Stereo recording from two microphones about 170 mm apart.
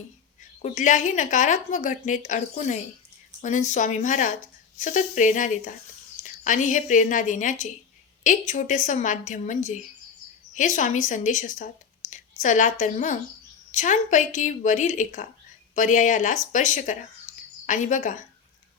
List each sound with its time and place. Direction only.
0.6 s a woman's voice: 45° left (ahead or behind)